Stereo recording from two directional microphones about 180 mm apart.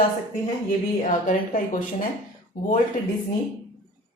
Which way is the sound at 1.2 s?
50° left (ahead or behind).